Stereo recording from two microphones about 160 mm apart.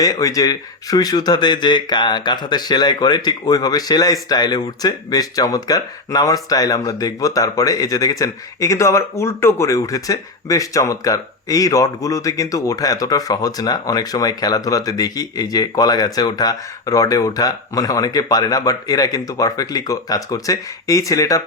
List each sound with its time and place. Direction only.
0.0 s speech: 20° left (ahead or behind)